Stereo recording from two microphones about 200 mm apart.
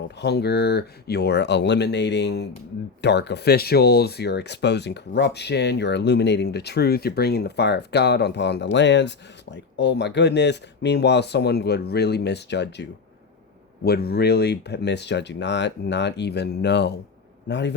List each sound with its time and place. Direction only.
0.2 s speech: 55° left (ahead or behind)